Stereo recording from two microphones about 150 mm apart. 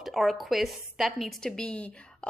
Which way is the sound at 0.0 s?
Centre (ahead or behind).